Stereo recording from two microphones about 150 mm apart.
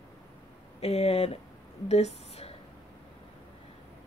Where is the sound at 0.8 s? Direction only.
45° left (ahead or behind).